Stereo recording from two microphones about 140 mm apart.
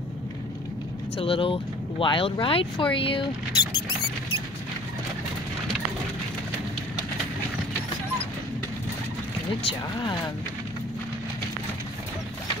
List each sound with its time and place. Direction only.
1.2 s speech: 40° left (ahead or behind)
9.7 s speech: 35° left (ahead or behind)